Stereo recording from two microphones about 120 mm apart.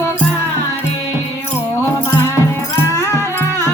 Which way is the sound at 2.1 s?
20° left (ahead or behind).